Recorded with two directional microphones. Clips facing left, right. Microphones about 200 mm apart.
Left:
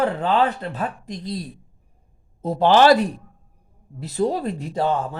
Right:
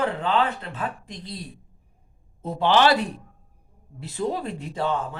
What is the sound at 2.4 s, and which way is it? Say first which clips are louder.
Speech: left 5 dB; 40° left (ahead or behind).